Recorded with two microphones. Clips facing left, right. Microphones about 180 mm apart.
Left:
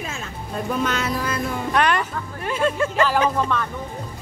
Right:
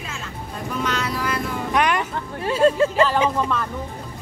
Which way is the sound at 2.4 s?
30° right (ahead or behind).